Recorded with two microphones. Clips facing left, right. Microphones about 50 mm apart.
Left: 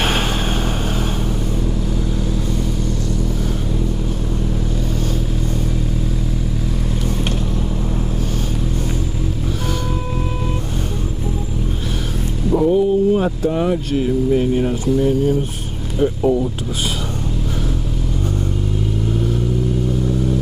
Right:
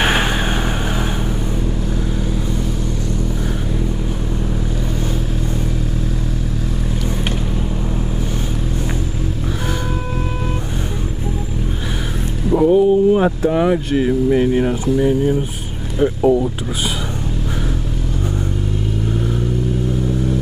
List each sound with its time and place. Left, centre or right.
0.0 s vehicle: centre
12.4 s speech: centre